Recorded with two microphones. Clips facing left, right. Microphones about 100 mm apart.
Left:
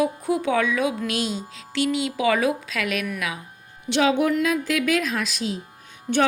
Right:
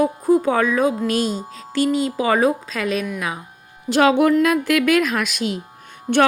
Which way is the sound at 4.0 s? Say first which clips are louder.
Right 5 dB; 55° right (ahead or behind).